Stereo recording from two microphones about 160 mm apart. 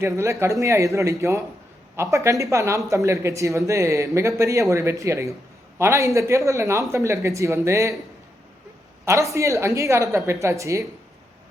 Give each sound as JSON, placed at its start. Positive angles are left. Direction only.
{"t": 0.0, "sound": "speech", "side_deg": -15}
{"t": 9.0, "sound": "speech", "side_deg": -20}